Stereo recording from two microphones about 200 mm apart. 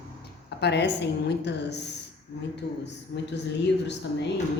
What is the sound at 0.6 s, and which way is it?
A woman's voice, 60° left (ahead or behind).